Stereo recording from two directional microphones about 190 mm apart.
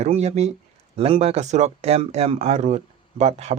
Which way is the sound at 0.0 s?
35° right (ahead or behind).